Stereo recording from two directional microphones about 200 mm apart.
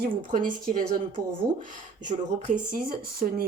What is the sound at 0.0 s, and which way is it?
Speech, 40° right (ahead or behind).